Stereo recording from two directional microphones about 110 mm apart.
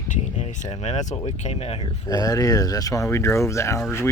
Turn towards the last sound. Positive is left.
turn(degrees=25)  # may be behind; listen again after turning